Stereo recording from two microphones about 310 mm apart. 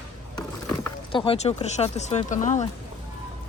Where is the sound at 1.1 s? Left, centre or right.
Centre.